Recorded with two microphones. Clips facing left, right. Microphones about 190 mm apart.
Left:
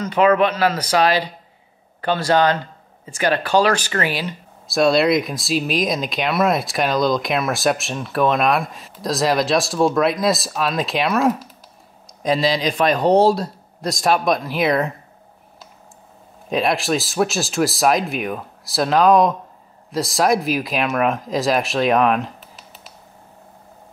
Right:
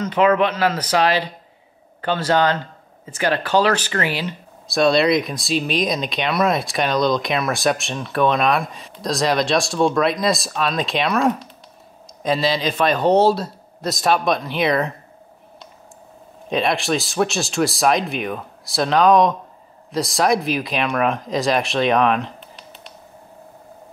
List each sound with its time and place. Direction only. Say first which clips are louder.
0.7 s speech: left 1 dB; 10° left (ahead or behind)
4.6 s speech: even; centre (ahead or behind)
16.4 s speech: left 1 dB; centre (ahead or behind)